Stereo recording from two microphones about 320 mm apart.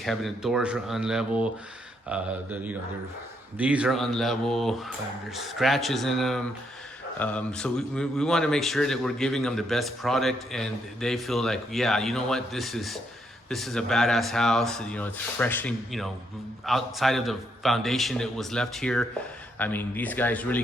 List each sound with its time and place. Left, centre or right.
0.0 s speech: centre